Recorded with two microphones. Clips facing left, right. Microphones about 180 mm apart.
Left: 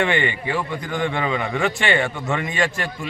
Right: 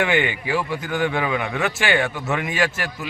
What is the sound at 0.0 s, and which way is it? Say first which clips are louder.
A man's voice: even; 5° right (ahead or behind).